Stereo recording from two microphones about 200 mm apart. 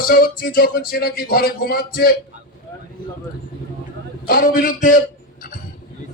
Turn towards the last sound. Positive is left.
turn(degrees=40)  # may be behind; listen again after turning